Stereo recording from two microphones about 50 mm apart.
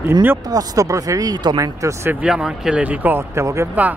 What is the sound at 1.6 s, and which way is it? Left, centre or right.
Speech, right.